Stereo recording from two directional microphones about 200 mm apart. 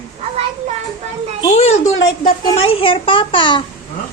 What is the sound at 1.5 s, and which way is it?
A woman's voice, 35° left (ahead or behind).